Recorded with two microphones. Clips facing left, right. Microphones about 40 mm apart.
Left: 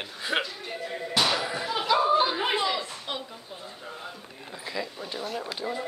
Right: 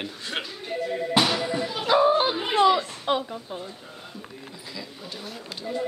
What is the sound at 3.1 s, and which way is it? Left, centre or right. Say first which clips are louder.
Speech: right 12 dB; right.